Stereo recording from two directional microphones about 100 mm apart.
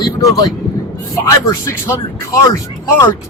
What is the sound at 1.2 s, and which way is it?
Speech, 30° left (ahead or behind).